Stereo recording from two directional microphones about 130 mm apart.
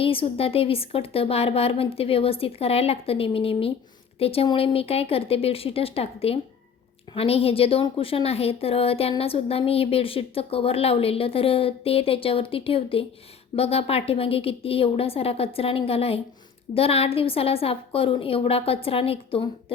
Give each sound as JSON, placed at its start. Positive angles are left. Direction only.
{"t": 0.0, "sound": "a woman's voice", "side_deg": 45}